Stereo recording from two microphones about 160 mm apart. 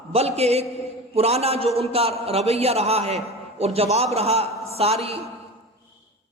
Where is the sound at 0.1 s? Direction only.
40° right (ahead or behind).